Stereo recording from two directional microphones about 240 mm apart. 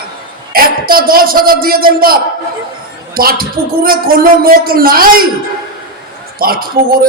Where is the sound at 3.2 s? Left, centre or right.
Right.